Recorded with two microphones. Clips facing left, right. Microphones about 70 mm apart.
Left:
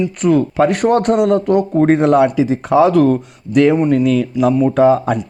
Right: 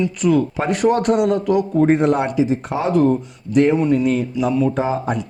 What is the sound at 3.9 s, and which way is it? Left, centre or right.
Speech, left.